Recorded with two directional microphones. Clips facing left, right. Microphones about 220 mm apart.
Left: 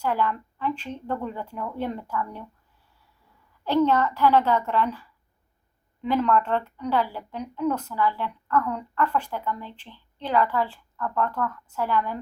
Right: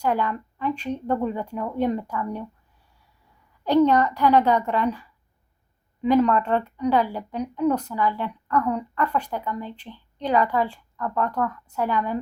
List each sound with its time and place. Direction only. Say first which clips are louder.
0.0 s speech: right 2 dB; 20° right (ahead or behind)
3.6 s speech: right 3 dB; 15° right (ahead or behind)
6.0 s speech: right 4 dB; 15° right (ahead or behind)